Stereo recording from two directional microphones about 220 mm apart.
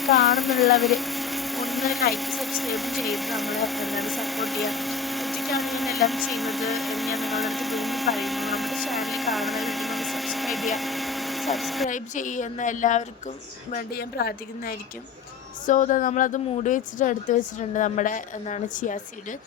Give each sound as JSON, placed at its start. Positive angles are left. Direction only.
{"t": 0.0, "sound": "speech", "side_deg": 0}
{"t": 11.9, "sound": "speech", "side_deg": 35}
{"t": 13.7, "sound": "speech", "side_deg": 45}